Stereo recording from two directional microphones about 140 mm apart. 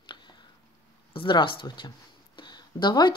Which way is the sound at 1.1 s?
35° left (ahead or behind).